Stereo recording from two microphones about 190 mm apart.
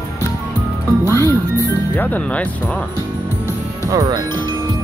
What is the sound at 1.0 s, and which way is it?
Speech, 15° left (ahead or behind).